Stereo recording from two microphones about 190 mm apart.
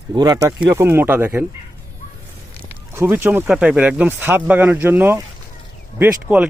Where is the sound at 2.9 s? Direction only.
15° right (ahead or behind).